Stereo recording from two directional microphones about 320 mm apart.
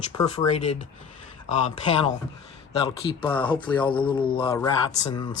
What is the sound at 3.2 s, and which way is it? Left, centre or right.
Speech, centre.